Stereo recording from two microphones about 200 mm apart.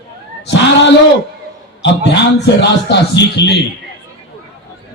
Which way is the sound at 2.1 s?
60° left (ahead or behind).